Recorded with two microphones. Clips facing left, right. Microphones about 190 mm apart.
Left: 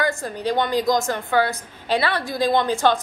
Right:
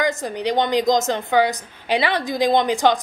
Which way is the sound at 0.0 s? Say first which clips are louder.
Right 2 dB; 20° right (ahead or behind).